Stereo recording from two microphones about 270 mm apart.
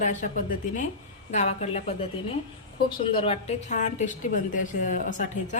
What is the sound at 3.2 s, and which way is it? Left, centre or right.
A woman's voice, left.